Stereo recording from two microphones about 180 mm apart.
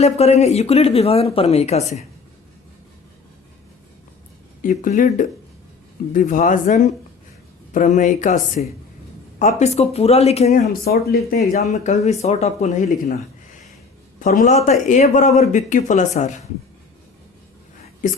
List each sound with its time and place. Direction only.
0.0 s speech: 35° left (ahead or behind)
4.6 s speech: 45° left (ahead or behind)
10.7 s speech: 60° left (ahead or behind)
11.7 s speech: 40° left (ahead or behind)
14.2 s speech: 40° left (ahead or behind)